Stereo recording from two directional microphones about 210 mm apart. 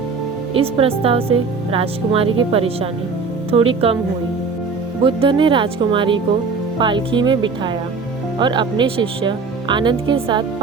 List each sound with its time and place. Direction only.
0.5 s a woman's voice: 25° right (ahead or behind)
5.0 s a woman's voice: 25° right (ahead or behind)